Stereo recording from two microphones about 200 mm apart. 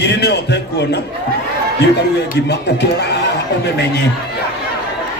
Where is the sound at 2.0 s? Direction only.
55° left (ahead or behind).